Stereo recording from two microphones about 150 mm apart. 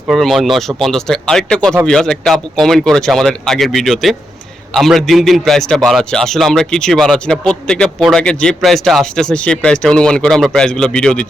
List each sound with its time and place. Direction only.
0.1 s a man's voice: centre (ahead or behind)